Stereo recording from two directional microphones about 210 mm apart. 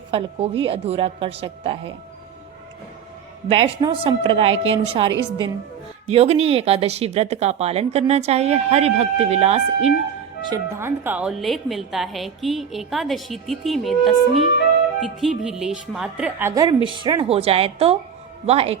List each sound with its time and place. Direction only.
0.1 s speech: 25° right (ahead or behind)
3.5 s speech: 25° right (ahead or behind)
10.4 s a woman's voice: 15° right (ahead or behind)